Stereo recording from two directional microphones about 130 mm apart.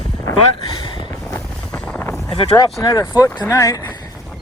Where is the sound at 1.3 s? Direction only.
15° left (ahead or behind).